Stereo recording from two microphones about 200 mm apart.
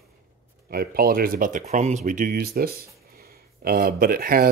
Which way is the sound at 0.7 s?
45° right (ahead or behind).